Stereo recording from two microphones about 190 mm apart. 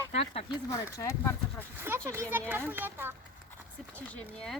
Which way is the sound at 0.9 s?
15° left (ahead or behind).